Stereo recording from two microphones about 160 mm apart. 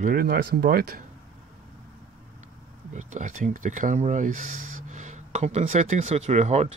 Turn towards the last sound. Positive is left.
turn(degrees=-45)  # may be behind; listen again after turning